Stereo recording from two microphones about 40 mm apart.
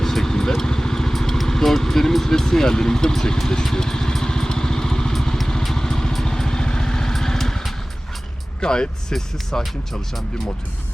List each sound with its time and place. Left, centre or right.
0.0 s vehicle: centre
8.6 s speech: left